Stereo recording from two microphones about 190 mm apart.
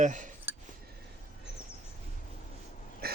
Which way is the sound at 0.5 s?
10° right (ahead or behind).